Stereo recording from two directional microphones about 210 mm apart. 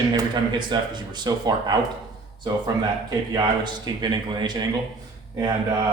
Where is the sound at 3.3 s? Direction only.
20° right (ahead or behind).